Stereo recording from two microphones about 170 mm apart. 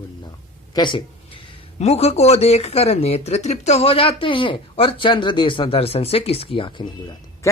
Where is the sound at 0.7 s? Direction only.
25° left (ahead or behind).